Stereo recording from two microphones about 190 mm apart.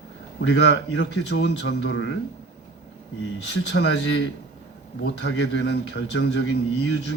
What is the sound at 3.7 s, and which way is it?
A man's voice, 70° left (ahead or behind).